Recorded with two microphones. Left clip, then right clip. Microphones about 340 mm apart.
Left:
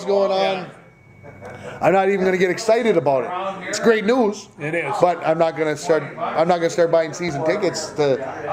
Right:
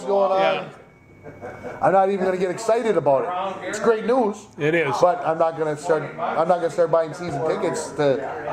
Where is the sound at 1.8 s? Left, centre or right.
Left.